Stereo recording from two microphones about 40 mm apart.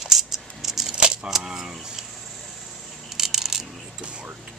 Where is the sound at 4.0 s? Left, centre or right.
Right.